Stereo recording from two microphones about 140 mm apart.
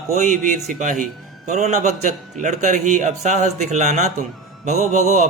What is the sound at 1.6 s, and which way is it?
A man's voice, 55° right (ahead or behind).